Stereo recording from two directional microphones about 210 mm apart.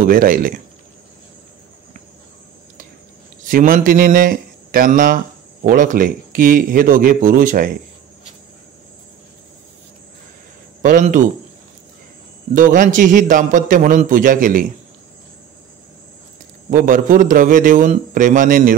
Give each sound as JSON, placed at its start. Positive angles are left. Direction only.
{"t": 0.0, "sound": "speech", "side_deg": -40}
{"t": 3.4, "sound": "speech", "side_deg": -40}
{"t": 10.8, "sound": "speech", "side_deg": -40}
{"t": 12.5, "sound": "speech", "side_deg": -40}
{"t": 16.7, "sound": "speech", "side_deg": -40}